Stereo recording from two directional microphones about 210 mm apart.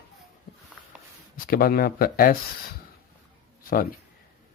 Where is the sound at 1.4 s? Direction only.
45° left (ahead or behind).